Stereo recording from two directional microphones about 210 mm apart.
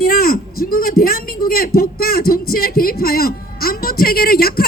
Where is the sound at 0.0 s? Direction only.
45° left (ahead or behind).